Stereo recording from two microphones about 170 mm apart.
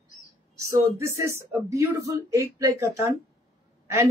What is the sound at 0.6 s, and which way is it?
Speech, 20° right (ahead or behind).